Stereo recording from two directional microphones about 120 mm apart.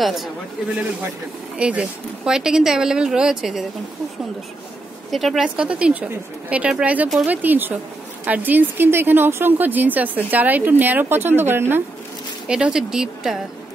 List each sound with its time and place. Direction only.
0.0 s speech: centre (ahead or behind)
1.6 s speech: 10° right (ahead or behind)
5.1 s a woman's voice: centre (ahead or behind); by 11.8 s 20° right (ahead or behind)
12.4 s speech: 5° right (ahead or behind)